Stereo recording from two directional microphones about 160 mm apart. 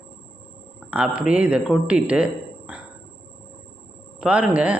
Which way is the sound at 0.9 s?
10° right (ahead or behind).